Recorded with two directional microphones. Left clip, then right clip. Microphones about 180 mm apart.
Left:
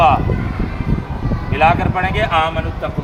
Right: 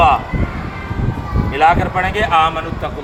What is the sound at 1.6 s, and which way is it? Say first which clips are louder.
Speech: right 1 dB; 15° left (ahead or behind).